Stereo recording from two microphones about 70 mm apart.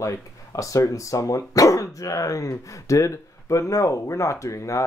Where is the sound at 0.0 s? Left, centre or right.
Left.